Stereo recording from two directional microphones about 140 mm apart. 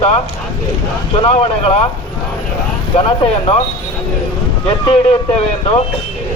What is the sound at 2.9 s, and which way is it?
Speech, 40° left (ahead or behind).